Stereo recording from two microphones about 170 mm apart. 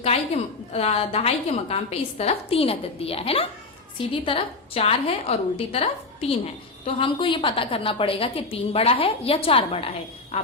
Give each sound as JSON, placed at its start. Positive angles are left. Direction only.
{"t": 0.0, "sound": "a woman's voice", "side_deg": 40}